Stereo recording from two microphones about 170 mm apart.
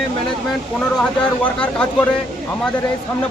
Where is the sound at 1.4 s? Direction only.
5° left (ahead or behind).